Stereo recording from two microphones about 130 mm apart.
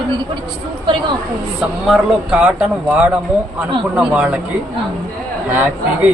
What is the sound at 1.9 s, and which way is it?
Speech, 5° right (ahead or behind).